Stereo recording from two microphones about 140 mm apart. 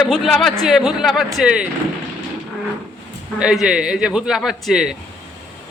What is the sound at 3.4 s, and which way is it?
A man's voice, 5° right (ahead or behind).